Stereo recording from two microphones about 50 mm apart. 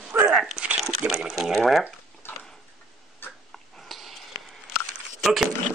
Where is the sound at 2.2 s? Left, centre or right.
Left.